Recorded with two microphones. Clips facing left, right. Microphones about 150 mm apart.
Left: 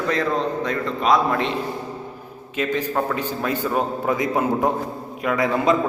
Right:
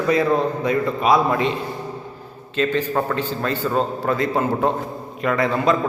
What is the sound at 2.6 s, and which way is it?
A man's voice, 10° left (ahead or behind).